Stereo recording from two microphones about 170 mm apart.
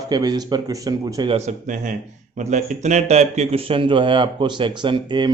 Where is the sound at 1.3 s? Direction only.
45° right (ahead or behind).